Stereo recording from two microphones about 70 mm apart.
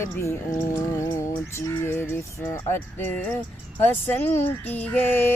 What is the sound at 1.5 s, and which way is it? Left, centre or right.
Female singing, left.